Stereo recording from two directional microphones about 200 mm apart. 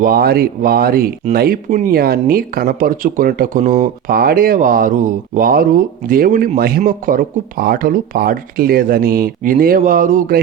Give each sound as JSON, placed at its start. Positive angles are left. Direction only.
{"t": 0.0, "sound": "speech", "side_deg": -50}